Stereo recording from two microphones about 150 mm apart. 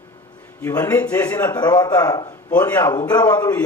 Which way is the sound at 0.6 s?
15° left (ahead or behind).